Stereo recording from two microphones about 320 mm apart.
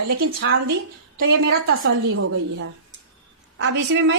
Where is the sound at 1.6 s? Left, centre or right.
Right.